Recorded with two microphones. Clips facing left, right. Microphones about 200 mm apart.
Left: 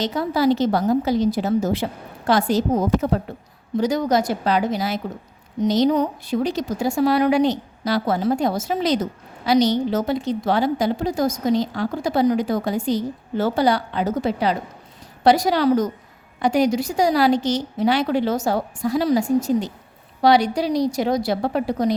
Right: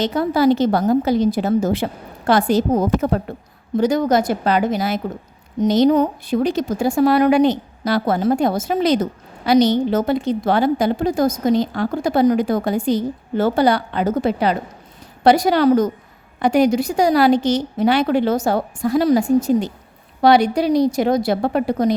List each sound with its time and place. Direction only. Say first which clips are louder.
0.0 s a woman's voice: right 4 dB; 55° right (ahead or behind)